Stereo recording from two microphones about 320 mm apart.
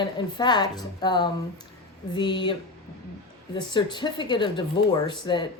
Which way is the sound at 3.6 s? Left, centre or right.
Centre.